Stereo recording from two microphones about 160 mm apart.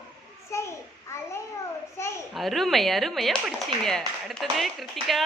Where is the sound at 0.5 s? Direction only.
15° left (ahead or behind).